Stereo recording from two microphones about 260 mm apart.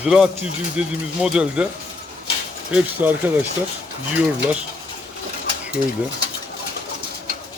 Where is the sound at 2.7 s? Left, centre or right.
Centre.